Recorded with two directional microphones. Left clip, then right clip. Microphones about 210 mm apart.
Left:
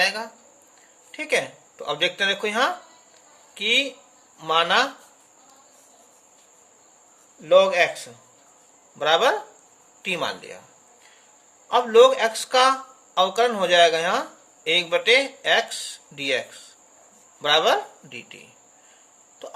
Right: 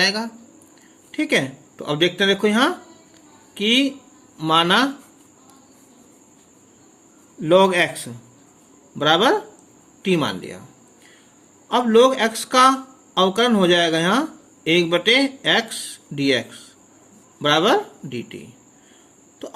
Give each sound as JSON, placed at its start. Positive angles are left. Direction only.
{"t": 0.0, "sound": "speech", "side_deg": -15}
{"t": 7.4, "sound": "speech", "side_deg": -20}
{"t": 11.7, "sound": "speech", "side_deg": -15}